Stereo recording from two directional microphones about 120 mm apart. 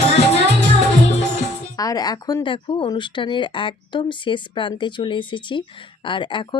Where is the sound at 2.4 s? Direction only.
45° left (ahead or behind).